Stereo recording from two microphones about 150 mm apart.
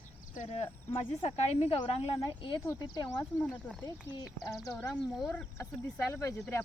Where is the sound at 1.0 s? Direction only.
45° left (ahead or behind).